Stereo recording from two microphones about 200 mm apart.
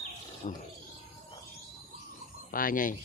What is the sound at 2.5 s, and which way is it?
Speech, 45° left (ahead or behind).